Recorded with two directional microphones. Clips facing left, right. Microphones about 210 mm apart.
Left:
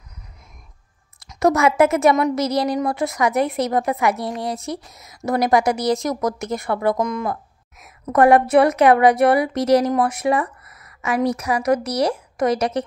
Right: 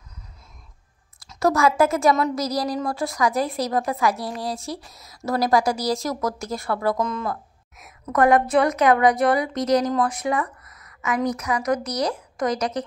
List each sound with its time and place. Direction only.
1.3 s a woman's voice: 20° left (ahead or behind)
8.1 s a woman's voice: 30° left (ahead or behind)